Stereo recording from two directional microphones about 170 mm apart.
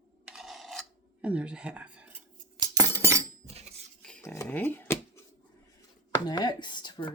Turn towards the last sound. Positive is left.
turn(degrees=25)  # may be behind; listen again after turning